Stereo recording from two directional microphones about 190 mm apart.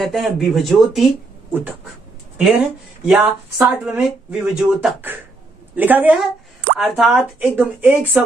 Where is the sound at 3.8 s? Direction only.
5° right (ahead or behind).